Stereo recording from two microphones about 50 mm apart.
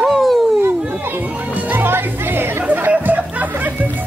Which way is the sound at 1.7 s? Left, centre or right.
Right.